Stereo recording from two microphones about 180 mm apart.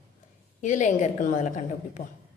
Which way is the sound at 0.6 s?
45° left (ahead or behind).